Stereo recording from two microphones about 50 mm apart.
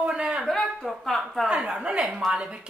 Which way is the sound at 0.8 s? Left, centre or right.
Centre.